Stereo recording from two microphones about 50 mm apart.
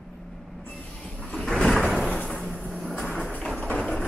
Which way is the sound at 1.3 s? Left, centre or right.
Centre.